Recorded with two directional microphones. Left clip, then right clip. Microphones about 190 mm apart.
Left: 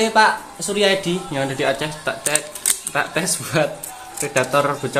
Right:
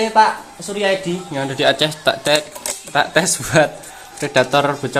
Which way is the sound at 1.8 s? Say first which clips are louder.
Right 7 dB; 55° right (ahead or behind).